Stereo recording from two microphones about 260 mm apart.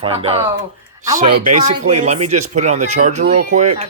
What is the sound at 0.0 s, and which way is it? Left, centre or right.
Speech, right.